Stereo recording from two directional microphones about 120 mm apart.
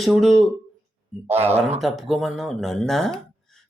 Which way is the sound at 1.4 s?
60° right (ahead or behind).